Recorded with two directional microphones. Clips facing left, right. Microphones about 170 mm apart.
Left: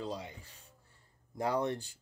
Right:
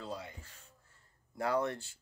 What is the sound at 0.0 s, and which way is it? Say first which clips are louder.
Rub: left 3 dB; 15° left (ahead or behind).